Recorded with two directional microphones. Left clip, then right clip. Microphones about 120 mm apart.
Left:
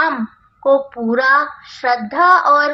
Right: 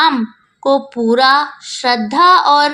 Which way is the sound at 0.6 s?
25° right (ahead or behind).